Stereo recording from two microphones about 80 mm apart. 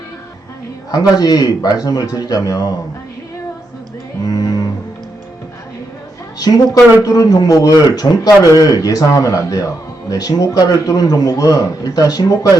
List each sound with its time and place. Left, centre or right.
0.9 s speech: left
4.2 s music: left
7.0 s speech: left